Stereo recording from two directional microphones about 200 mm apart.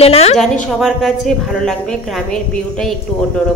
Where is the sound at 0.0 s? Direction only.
30° left (ahead or behind).